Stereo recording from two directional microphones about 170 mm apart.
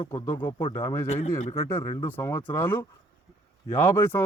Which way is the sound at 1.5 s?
15° left (ahead or behind).